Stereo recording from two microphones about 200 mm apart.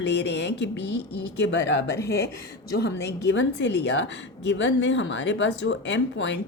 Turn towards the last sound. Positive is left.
turn(degrees=65)  # may be behind; listen again after turning